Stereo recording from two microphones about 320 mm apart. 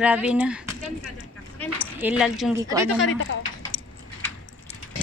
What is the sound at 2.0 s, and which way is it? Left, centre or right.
Speech, centre.